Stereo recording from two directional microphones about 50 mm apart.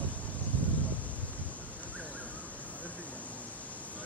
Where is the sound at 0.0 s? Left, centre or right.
Left.